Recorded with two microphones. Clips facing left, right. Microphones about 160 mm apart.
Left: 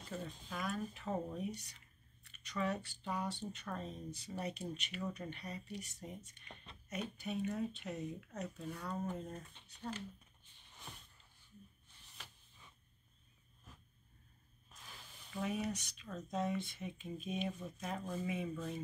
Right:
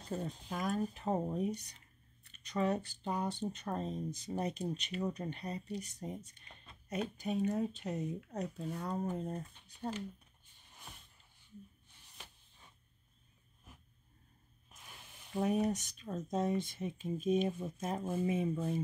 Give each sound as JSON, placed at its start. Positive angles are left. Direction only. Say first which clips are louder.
{"t": 0.1, "sound": "speech", "louder": "right 6 dB", "side_deg": -40}
{"t": 14.7, "sound": "snake", "louder": "even", "side_deg": -20}
{"t": 15.3, "sound": "speech", "louder": "right 7 dB", "side_deg": -40}
{"t": 18.0, "sound": "speech", "louder": "right 8 dB", "side_deg": -25}